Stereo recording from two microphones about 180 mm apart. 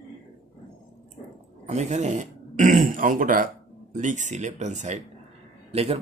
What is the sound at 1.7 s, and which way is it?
Speech, 40° right (ahead or behind).